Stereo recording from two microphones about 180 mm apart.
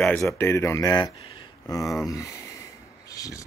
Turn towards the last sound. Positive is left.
turn(degrees=20)  # may be behind; listen again after turning